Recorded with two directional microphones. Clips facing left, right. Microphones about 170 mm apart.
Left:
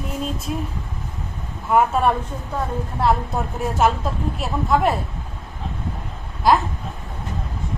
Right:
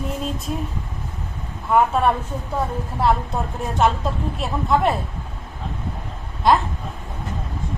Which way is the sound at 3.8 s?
5° left (ahead or behind).